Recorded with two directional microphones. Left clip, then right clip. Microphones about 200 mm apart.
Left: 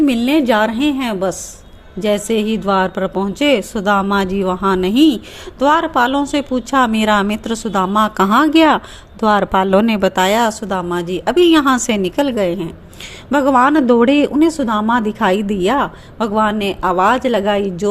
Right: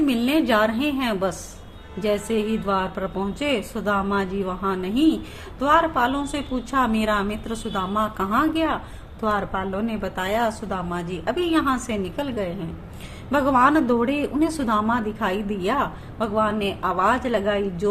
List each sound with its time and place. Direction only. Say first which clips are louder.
0.0 s a woman's voice: left 7 dB; 35° left (ahead or behind)